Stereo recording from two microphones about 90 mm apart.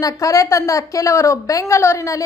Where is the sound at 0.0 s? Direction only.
40° left (ahead or behind).